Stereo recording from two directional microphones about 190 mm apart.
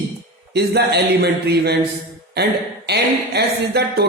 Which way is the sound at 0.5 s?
60° right (ahead or behind).